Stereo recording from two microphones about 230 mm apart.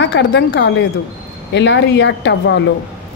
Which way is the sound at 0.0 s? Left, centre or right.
Left.